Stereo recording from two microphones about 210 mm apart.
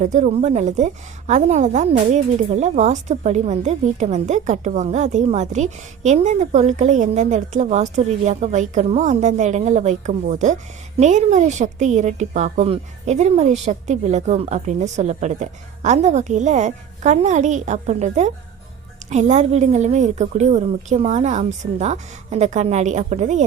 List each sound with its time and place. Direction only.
0.0 s a woman's voice: 35° right (ahead or behind)